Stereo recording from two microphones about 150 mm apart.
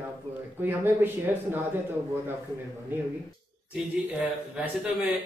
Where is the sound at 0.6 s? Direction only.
15° right (ahead or behind).